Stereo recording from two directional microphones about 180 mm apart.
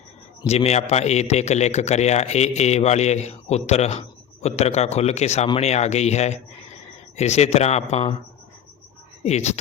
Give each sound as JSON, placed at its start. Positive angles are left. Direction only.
{"t": 0.4, "sound": "a man's voice", "side_deg": 35}
{"t": 9.2, "sound": "a man's voice", "side_deg": 40}